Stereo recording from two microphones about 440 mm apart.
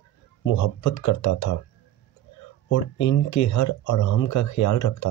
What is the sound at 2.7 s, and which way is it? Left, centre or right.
Speech, left.